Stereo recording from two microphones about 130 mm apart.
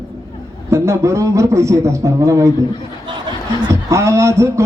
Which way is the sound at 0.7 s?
20° right (ahead or behind).